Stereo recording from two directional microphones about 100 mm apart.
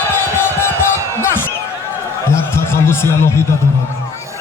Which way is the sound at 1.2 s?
25° left (ahead or behind).